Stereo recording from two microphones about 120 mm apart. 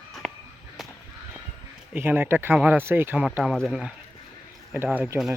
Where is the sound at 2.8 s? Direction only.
20° right (ahead or behind).